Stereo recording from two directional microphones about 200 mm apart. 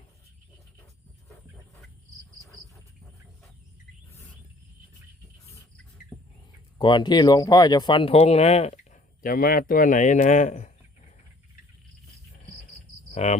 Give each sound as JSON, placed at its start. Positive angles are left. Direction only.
{"t": 6.7, "sound": "speech", "side_deg": 20}
{"t": 13.1, "sound": "cricket", "side_deg": 35}